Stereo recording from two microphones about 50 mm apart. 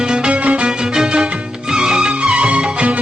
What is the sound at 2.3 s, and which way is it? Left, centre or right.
Music, right.